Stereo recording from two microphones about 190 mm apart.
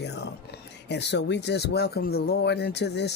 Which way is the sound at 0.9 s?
65° left (ahead or behind).